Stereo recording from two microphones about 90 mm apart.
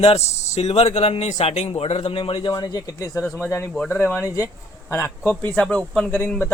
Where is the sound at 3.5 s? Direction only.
30° left (ahead or behind).